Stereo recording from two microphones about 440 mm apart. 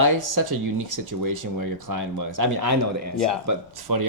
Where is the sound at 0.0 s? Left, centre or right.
Right.